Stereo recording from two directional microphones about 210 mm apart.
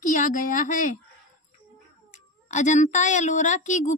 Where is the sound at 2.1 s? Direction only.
35° left (ahead or behind).